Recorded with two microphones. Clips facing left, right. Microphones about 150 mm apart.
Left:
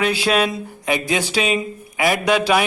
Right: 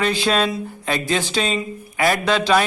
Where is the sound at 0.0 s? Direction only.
10° left (ahead or behind).